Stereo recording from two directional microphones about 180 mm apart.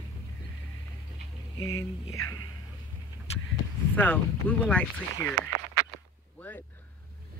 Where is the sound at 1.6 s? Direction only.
20° left (ahead or behind).